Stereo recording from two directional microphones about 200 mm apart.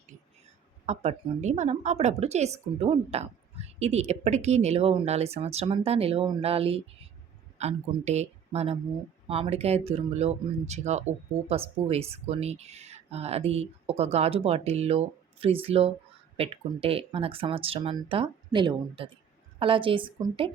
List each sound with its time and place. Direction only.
0.9 s speech: 35° right (ahead or behind)